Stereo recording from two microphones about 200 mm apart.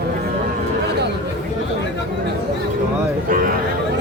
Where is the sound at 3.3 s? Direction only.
45° right (ahead or behind).